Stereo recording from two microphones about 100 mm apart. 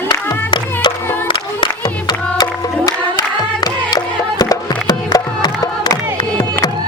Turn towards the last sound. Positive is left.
turn(degrees=40)  # may be behind; listen again after turning